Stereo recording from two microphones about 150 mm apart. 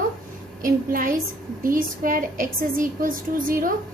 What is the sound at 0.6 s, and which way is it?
A woman's voice, 70° right (ahead or behind).